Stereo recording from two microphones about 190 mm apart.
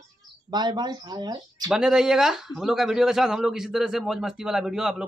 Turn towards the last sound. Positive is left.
turn(degrees=-5)  # may be behind; listen again after turning